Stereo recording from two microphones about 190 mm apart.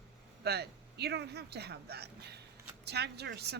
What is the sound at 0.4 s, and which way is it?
A woman's voice, 60° right (ahead or behind).